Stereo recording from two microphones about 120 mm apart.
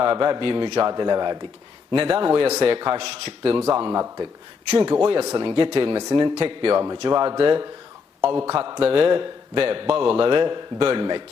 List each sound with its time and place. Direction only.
0.0 s a man's voice: 40° right (ahead or behind)
3.1 s a man's voice: 55° right (ahead or behind)
3.8 s speech: 35° right (ahead or behind)
6.3 s a man's voice: 50° right (ahead or behind)
6.8 s a man's voice: 30° right (ahead or behind)